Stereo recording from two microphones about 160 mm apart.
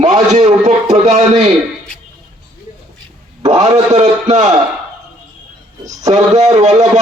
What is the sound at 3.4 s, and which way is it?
A man's voice, 45° right (ahead or behind).